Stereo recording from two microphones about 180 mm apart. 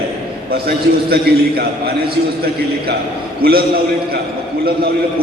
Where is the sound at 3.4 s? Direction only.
60° right (ahead or behind).